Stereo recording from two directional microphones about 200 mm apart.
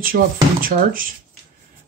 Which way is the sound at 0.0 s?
45° right (ahead or behind).